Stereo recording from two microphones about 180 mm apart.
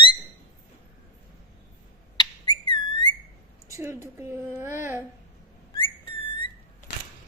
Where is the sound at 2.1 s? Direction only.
30° left (ahead or behind).